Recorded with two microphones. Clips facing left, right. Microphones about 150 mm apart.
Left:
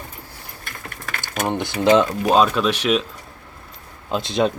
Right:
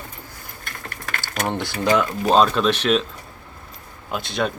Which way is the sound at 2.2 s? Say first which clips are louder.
Even; 5° left (ahead or behind).